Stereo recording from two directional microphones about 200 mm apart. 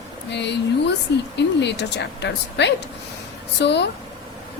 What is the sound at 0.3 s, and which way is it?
A woman's voice, 60° left (ahead or behind).